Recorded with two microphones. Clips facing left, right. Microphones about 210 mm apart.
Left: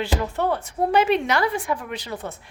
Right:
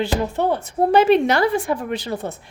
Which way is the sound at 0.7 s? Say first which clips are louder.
Right 6 dB; 30° right (ahead or behind).